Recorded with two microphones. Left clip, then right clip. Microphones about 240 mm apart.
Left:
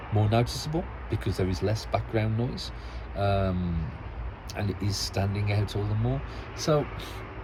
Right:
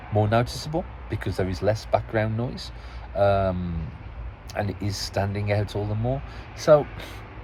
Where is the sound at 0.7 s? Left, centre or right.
Right.